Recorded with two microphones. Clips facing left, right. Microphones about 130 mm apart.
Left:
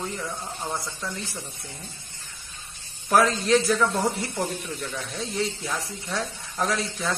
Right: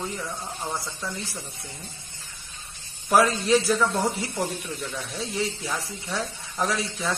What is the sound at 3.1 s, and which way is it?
A man's voice, 5° right (ahead or behind).